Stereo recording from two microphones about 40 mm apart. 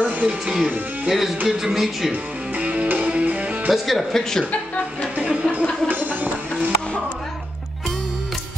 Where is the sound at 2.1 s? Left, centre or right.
Right.